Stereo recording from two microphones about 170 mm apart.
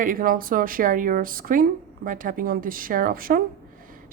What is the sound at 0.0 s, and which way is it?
A woman's voice, 55° right (ahead or behind).